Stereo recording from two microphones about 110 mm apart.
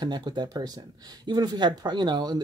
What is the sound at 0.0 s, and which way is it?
Speech, 40° right (ahead or behind).